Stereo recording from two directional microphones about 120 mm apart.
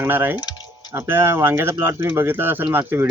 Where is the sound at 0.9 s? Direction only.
20° right (ahead or behind).